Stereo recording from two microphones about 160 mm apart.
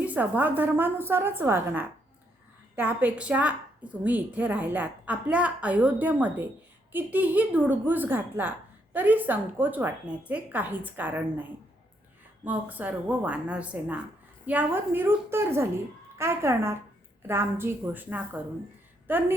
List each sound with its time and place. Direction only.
0.0 s a woman's voice: 10° right (ahead or behind)
12.5 s a woman's voice: 10° right (ahead or behind)